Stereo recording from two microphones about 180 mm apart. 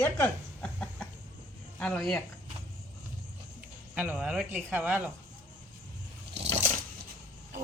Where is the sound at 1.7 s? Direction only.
5° left (ahead or behind).